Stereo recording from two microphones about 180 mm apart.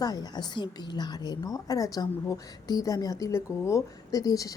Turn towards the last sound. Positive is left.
turn(degrees=20)  # may be behind; listen again after turning